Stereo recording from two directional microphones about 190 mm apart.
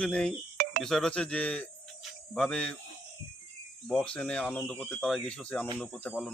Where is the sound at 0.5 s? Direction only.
50° right (ahead or behind).